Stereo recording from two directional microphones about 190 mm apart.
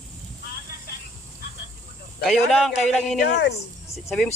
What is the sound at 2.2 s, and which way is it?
Speech, centre (ahead or behind).